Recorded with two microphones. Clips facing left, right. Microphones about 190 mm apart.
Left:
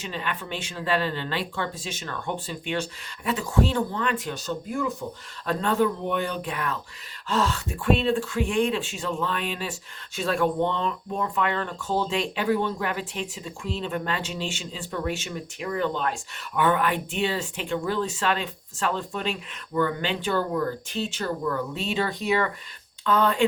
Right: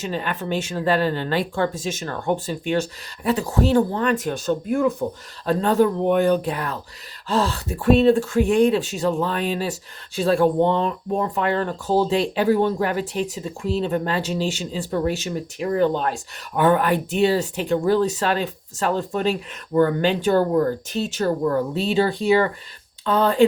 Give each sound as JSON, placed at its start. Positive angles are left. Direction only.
{"t": 0.0, "sound": "speech", "side_deg": -40}
{"t": 5.5, "sound": "speech", "side_deg": -35}